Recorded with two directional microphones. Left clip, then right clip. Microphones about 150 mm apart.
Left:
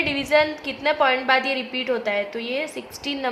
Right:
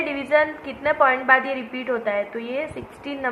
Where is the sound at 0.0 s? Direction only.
35° left (ahead or behind).